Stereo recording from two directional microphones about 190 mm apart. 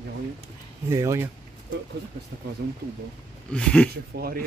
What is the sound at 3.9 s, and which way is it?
Speech, 50° right (ahead or behind).